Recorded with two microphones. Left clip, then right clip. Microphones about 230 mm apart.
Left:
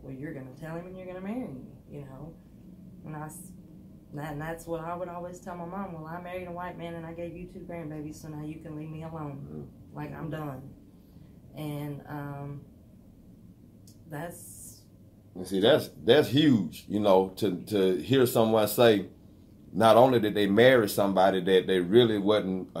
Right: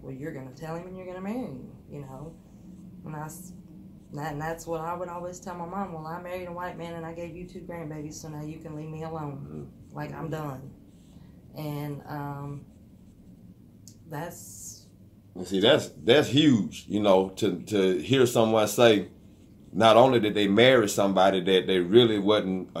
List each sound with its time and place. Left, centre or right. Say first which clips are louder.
0.6 s speech: right 3 dB; right
4.1 s speech: right 4 dB; right
9.9 s speech: right 3 dB; right
11.5 s speech: right 2 dB; right
15.3 s speech: right 1 dB; centre